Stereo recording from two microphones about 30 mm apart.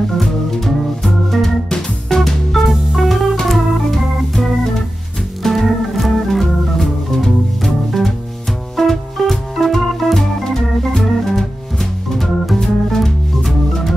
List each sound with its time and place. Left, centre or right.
0.7 s organ: centre
1.7 s music: centre
2.7 s music: centre
3.4 s organ: centre